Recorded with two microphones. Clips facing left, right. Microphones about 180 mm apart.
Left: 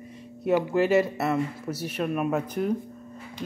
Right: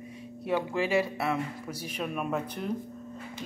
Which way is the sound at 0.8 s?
10° right (ahead or behind).